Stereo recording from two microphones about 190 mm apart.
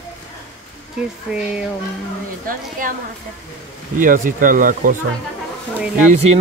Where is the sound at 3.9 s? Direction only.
45° right (ahead or behind).